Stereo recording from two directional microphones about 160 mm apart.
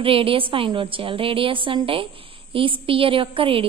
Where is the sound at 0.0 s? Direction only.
35° right (ahead or behind).